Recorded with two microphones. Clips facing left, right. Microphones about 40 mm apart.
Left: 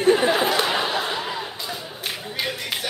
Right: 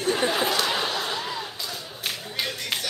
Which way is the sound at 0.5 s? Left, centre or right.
Centre.